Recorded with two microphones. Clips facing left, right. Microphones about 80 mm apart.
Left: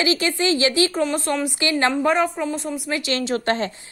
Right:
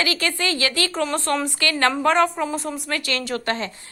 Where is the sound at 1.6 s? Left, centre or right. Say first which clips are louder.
Left 1 dB; centre.